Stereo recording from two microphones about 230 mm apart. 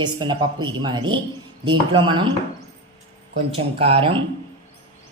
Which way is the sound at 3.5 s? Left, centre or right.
Right.